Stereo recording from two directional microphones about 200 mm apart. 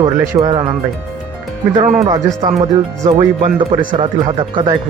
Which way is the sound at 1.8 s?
35° right (ahead or behind).